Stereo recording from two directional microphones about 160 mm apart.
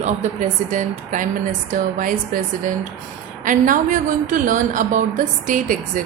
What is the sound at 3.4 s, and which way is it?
A woman's voice, 55° right (ahead or behind).